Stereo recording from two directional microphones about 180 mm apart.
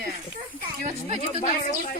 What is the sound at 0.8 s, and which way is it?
Speech, 35° right (ahead or behind).